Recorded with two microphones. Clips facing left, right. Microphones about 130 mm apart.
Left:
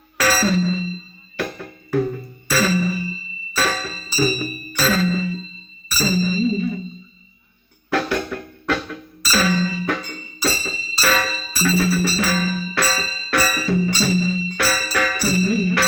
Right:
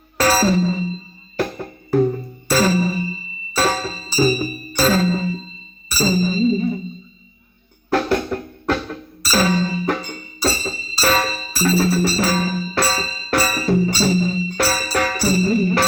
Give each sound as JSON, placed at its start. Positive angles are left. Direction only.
{"t": 0.2, "sound": "music", "side_deg": -35}
{"t": 7.9, "sound": "music", "side_deg": -35}